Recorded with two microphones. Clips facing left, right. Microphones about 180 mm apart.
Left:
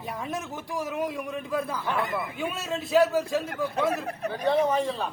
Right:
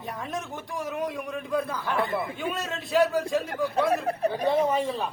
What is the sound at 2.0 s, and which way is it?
Speech, 30° right (ahead or behind).